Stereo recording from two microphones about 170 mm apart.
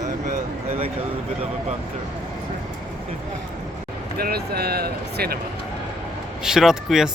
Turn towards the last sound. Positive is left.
turn(degrees=-5)  # may be behind; listen again after turning